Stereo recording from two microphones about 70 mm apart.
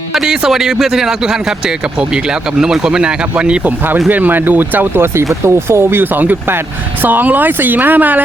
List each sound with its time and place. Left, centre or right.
0.1 s speech: centre
4.1 s speech: right